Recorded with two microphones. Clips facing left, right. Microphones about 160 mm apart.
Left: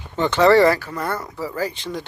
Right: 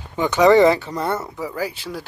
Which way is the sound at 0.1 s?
10° right (ahead or behind).